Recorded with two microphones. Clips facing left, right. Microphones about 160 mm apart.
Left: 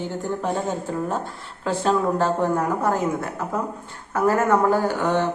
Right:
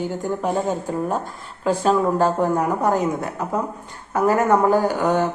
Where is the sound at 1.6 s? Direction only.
10° right (ahead or behind).